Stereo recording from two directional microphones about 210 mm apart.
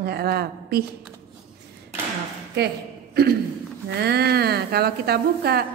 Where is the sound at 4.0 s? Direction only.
50° right (ahead or behind).